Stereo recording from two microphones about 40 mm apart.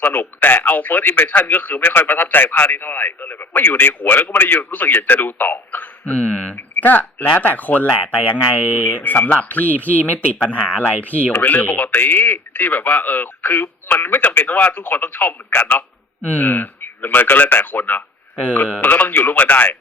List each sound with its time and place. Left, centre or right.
0.0 s speech: left
6.1 s speech: left
6.6 s speech: left